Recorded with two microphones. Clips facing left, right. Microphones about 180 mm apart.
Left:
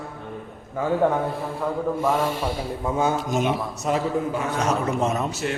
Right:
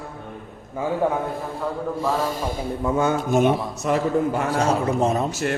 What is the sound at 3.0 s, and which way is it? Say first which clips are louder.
A man's voice: right 3 dB; 60° right (ahead or behind).